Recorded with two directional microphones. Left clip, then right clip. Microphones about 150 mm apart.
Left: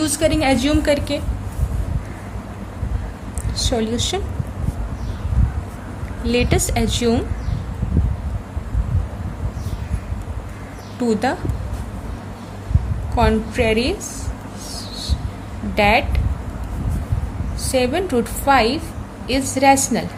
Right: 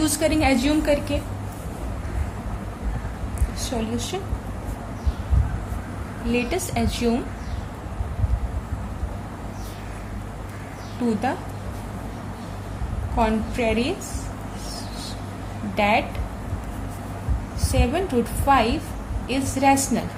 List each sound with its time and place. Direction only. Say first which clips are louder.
0.0 s a woman's voice: left 3 dB; 30° left (ahead or behind); by 1.2 s 45° left (ahead or behind)
3.5 s a woman's voice: left 7 dB; 70° left (ahead or behind)
6.2 s a woman's voice: left 6 dB; 55° left (ahead or behind)
13.1 s a woman's voice: left 5 dB; 50° left (ahead or behind)
15.7 s a woman's voice: left 5 dB; 50° left (ahead or behind)
17.7 s a woman's voice: left 5 dB; 50° left (ahead or behind)